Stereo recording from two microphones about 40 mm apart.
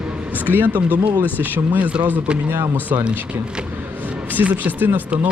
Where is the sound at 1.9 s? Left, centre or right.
Right.